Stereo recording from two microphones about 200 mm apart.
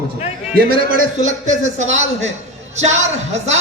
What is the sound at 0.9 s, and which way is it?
Speech, 45° right (ahead or behind).